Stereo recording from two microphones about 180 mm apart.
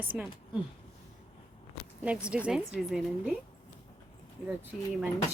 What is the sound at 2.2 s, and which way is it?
Speech, 5° right (ahead or behind).